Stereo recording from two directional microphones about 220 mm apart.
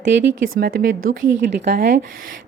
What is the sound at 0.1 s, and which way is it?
A woman's voice, 55° right (ahead or behind).